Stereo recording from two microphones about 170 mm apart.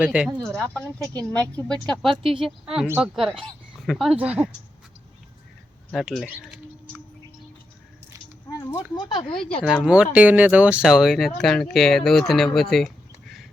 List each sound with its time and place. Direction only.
0.0 s speech: 5° right (ahead or behind)
0.4 s speech: 5° left (ahead or behind)
5.9 s speech: centre (ahead or behind)
8.4 s speech: 20° left (ahead or behind)
9.6 s speech: 5° right (ahead or behind)